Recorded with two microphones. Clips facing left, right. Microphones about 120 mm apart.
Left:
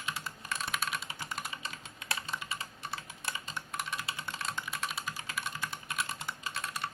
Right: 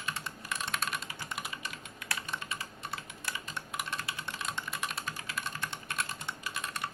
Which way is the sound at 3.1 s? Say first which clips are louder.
Even; 25° left (ahead or behind).